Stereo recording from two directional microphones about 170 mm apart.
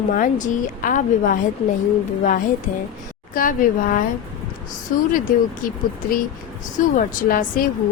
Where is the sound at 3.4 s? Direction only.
55° left (ahead or behind).